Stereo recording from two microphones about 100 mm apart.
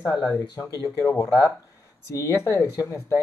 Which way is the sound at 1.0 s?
35° left (ahead or behind).